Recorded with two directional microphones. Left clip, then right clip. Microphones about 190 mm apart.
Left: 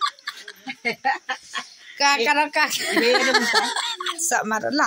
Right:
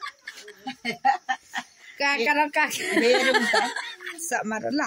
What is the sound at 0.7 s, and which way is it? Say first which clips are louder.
Speech: even; 25° right (ahead or behind).